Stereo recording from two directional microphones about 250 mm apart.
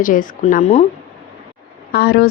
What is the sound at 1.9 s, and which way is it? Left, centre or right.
Speech, left.